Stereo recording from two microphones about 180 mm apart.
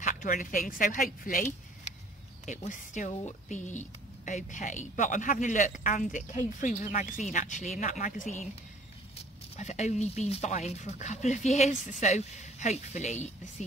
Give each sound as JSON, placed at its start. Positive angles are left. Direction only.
{"t": 0.0, "sound": "speech", "side_deg": 45}